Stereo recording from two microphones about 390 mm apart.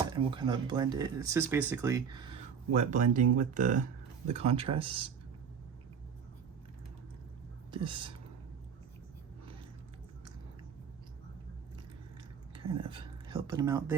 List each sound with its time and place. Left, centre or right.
0.2 s speech: centre
7.7 s speech: centre
12.8 s speech: centre